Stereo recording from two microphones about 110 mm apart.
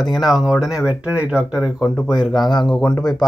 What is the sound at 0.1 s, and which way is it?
A man's voice, centre (ahead or behind).